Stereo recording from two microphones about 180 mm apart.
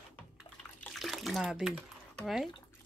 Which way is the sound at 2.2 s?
Centre (ahead or behind).